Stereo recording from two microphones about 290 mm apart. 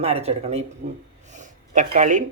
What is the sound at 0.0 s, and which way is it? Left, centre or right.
Speech, right.